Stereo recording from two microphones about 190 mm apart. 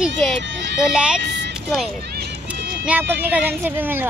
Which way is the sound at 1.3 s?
60° right (ahead or behind).